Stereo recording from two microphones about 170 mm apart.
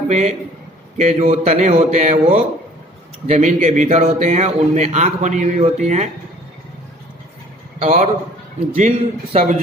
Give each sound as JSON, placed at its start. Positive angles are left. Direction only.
{"t": 0.1, "sound": "speech", "side_deg": -40}
{"t": 7.8, "sound": "speech", "side_deg": -40}